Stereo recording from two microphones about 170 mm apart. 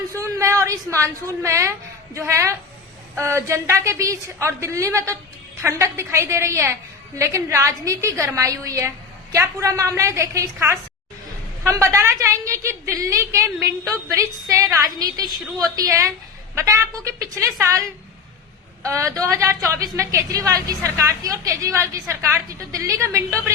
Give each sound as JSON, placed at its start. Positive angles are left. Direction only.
{"t": 0.1, "sound": "a woman's voice", "side_deg": -20}